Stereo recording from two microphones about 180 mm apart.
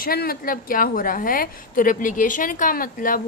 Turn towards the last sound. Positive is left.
turn(degrees=50)  # may be behind; listen again after turning